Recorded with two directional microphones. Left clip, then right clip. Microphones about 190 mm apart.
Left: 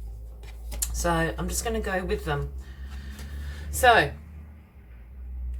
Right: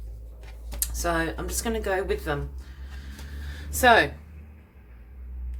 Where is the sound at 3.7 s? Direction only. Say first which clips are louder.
Right 1 dB; 30° right (ahead or behind).